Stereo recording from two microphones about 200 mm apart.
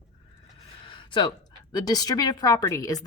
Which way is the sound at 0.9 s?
25° left (ahead or behind).